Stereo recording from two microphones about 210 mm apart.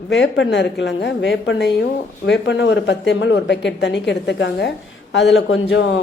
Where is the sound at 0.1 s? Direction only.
60° left (ahead or behind).